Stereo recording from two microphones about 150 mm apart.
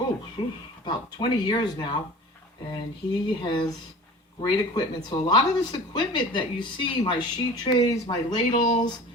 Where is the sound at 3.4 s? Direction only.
30° left (ahead or behind).